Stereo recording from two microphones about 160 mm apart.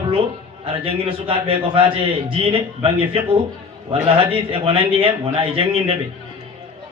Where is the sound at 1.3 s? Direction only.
35° right (ahead or behind).